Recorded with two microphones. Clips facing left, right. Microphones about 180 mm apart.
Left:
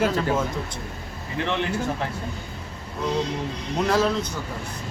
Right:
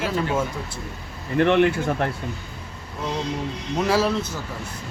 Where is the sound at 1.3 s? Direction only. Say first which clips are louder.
Right 8 dB; 55° right (ahead or behind).